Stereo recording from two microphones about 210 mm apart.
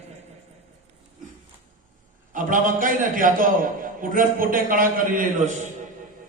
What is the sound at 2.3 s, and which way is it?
A man's voice, 40° right (ahead or behind).